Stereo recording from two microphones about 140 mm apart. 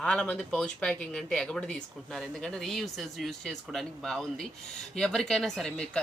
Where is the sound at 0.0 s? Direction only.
5° left (ahead or behind).